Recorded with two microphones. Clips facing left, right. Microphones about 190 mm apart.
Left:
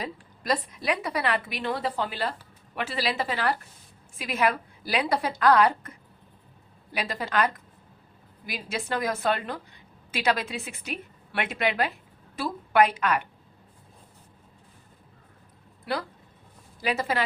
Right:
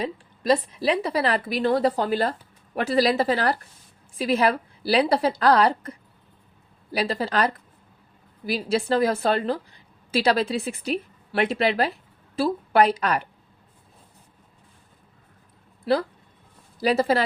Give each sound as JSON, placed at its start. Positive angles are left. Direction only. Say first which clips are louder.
{"t": 0.0, "sound": "a woman's voice", "louder": "right 7 dB", "side_deg": -25}
{"t": 15.9, "sound": "a woman's voice", "louder": "right 8 dB", "side_deg": -30}